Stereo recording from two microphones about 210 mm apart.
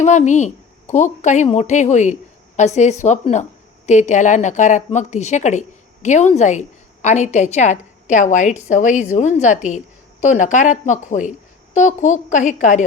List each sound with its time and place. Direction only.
0.0 s a woman's voice: 35° left (ahead or behind)